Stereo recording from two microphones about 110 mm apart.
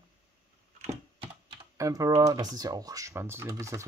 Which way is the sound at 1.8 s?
30° right (ahead or behind).